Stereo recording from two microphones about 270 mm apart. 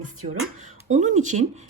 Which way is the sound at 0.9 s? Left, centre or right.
Right.